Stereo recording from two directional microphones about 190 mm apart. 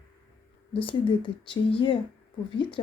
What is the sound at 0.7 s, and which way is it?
Speech, 25° left (ahead or behind).